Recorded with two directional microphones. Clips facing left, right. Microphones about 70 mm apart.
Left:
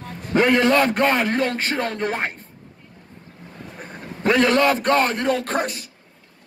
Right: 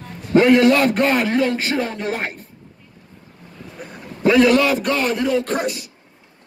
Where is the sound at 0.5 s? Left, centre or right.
Left.